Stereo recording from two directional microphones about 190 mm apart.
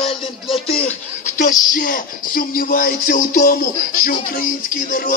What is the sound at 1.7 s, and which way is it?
Music, 45° left (ahead or behind).